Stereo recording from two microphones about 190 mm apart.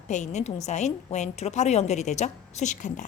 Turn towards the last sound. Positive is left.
turn(degrees=40)  # may be behind; listen again after turning